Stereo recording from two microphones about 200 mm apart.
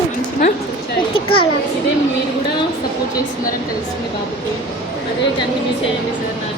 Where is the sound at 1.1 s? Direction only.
90° left.